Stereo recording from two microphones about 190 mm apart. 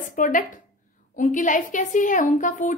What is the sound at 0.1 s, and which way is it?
A woman's voice, 45° left (ahead or behind).